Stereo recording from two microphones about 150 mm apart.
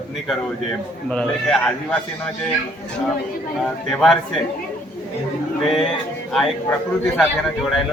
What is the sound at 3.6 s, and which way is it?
Speech, centre (ahead or behind).